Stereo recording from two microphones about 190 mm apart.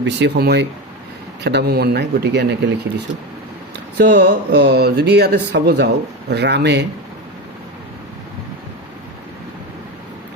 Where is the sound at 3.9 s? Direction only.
65° right (ahead or behind).